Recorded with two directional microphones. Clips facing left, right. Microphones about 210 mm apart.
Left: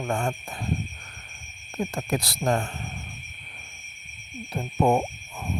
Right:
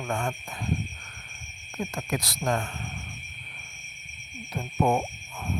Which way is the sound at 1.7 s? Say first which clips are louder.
Left 3 dB; 30° left (ahead or behind).